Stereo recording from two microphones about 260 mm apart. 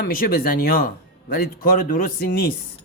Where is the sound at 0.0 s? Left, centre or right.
Left.